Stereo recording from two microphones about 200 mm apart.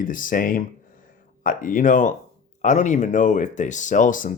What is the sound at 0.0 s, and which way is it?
Speech, 45° left (ahead or behind).